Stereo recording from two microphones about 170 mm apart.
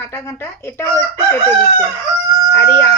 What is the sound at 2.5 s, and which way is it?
Speech, 15° left (ahead or behind).